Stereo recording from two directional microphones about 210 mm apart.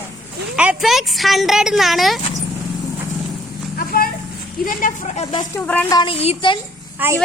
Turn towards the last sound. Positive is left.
turn(degrees=-10)  # may be behind; listen again after turning